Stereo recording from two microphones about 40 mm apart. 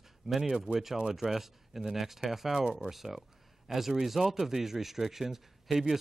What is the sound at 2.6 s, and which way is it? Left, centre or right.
Speech, right.